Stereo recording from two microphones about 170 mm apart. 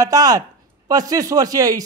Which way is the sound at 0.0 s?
20° right (ahead or behind).